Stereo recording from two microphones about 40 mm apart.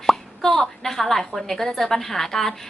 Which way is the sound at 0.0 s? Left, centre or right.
Centre.